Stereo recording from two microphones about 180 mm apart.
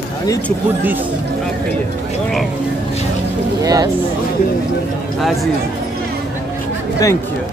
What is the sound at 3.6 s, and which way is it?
Speech, 20° right (ahead or behind).